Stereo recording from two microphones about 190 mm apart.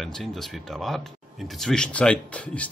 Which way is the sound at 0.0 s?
Centre (ahead or behind).